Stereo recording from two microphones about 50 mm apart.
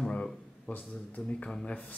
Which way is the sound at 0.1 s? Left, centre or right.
Left.